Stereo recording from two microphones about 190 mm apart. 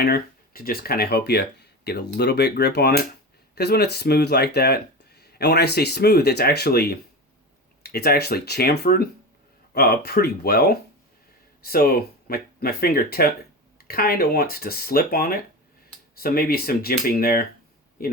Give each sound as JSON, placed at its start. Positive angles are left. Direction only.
{"t": 0.0, "sound": "a man's voice", "side_deg": 55}